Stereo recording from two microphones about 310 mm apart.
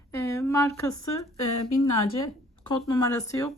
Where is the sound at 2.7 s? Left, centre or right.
Centre.